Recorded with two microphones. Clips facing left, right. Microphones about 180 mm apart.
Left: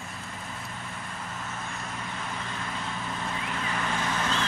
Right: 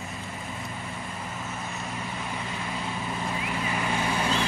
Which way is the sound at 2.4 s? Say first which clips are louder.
Right 2 dB; 10° right (ahead or behind).